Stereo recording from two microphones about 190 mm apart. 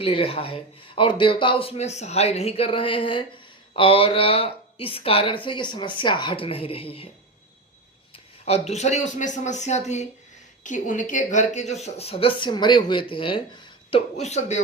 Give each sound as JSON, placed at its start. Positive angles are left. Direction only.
{"t": 0.0, "sound": "speech", "side_deg": 30}
{"t": 8.1, "sound": "speech", "side_deg": 35}
{"t": 14.2, "sound": "speech", "side_deg": 35}